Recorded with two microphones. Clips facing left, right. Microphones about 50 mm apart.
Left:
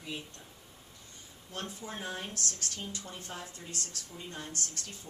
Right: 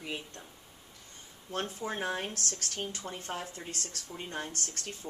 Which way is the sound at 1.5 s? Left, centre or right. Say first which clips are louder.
Right 6 dB; right.